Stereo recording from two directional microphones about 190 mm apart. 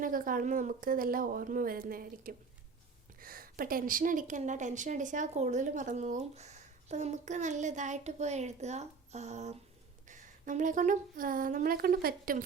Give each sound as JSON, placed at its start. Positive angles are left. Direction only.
{"t": 0.0, "sound": "a woman's voice", "side_deg": -45}